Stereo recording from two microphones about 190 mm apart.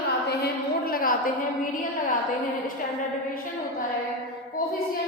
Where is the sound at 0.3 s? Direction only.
55° left (ahead or behind).